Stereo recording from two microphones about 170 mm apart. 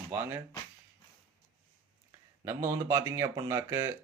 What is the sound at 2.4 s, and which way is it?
A man's voice, 15° right (ahead or behind).